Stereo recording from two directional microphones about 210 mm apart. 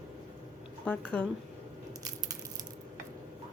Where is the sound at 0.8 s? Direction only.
5° left (ahead or behind).